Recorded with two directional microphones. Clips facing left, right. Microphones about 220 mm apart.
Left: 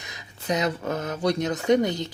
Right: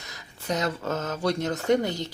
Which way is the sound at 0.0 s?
15° left (ahead or behind).